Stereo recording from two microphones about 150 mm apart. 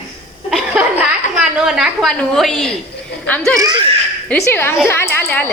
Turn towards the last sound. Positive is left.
turn(degrees=15)  # may be behind; listen again after turning